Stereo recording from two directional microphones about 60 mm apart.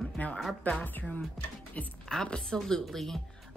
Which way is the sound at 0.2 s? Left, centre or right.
Left.